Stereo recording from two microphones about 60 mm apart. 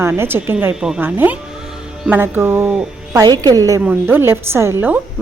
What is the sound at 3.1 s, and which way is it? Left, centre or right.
Speech, right.